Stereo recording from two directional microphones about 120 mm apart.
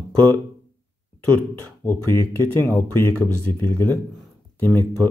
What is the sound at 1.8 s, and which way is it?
Speech, 20° left (ahead or behind).